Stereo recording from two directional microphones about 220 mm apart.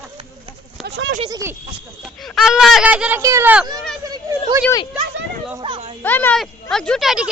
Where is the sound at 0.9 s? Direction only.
55° right (ahead or behind).